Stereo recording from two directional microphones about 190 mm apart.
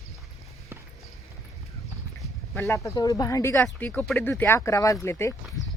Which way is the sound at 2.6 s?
15° left (ahead or behind).